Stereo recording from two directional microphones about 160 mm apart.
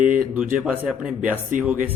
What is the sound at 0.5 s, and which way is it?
Speech, 10° right (ahead or behind).